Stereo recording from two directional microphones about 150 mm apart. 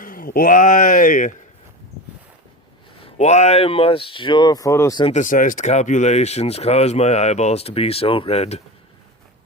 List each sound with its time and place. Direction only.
0.0 s speech: 70° left (ahead or behind)
3.0 s speech: 50° left (ahead or behind); by 4.9 s 20° left (ahead or behind)
5.1 s speech: 60° left (ahead or behind); by 8.6 s 45° left (ahead or behind)